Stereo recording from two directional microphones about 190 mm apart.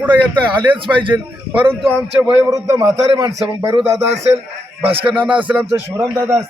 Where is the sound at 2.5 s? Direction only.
20° right (ahead or behind).